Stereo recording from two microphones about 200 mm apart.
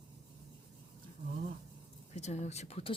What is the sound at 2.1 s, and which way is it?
Speech, 35° left (ahead or behind).